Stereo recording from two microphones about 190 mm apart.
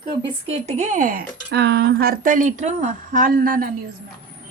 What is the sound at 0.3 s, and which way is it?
Speech, 30° right (ahead or behind).